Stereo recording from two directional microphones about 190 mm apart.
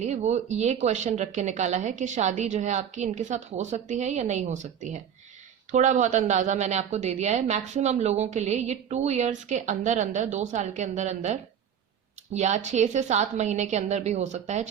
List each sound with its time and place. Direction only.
0.0 s a woman's voice: 35° right (ahead or behind)